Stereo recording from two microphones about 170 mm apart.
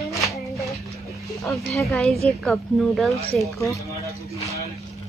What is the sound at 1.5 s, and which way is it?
Speech, centre (ahead or behind).